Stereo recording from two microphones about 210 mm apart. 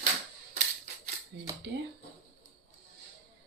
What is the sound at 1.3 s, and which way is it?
Speech, 55° right (ahead or behind).